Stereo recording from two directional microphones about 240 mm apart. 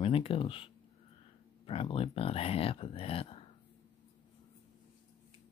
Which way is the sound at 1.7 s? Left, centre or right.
Left.